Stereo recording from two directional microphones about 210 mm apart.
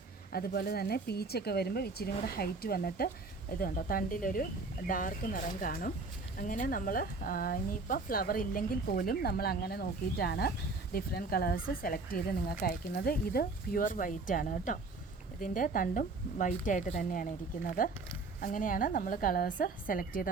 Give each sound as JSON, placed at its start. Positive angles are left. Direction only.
{"t": 0.3, "sound": "a woman's voice", "side_deg": 45}